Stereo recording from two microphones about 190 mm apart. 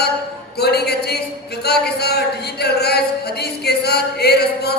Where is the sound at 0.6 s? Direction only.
60° left (ahead or behind).